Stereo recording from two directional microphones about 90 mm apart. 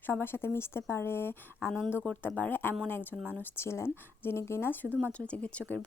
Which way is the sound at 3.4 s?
30° left (ahead or behind).